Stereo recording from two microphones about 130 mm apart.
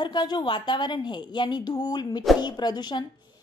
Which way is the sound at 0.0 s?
35° left (ahead or behind).